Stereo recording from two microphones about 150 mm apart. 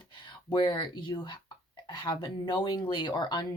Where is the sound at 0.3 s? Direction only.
30° left (ahead or behind).